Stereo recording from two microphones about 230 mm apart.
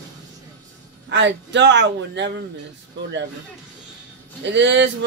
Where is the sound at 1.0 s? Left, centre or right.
Right.